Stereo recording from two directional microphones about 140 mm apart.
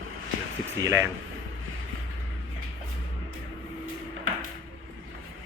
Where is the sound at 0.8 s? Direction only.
20° right (ahead or behind).